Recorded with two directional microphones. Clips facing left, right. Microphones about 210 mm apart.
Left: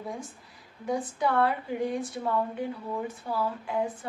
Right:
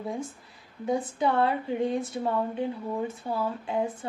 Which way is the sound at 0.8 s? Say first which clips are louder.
Right 2 dB; 25° right (ahead or behind).